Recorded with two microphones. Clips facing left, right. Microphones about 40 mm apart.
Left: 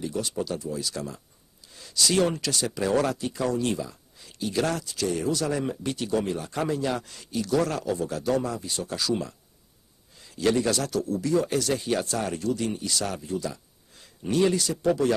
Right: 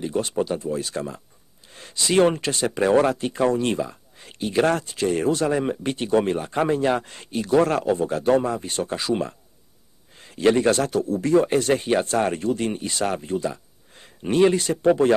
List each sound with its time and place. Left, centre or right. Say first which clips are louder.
0.0 s speech: right 6 dB; right
1.7 s a sound: right 5 dB; right
2.0 s speech: right 5 dB; right